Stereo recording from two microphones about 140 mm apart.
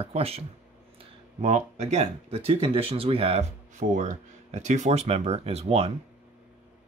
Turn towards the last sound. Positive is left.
turn(degrees=-45)  # may be behind; listen again after turning